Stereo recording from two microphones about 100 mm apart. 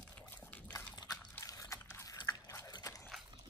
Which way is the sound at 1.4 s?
35° left (ahead or behind).